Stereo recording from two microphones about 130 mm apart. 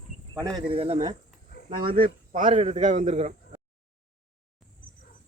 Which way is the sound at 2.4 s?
55° right (ahead or behind).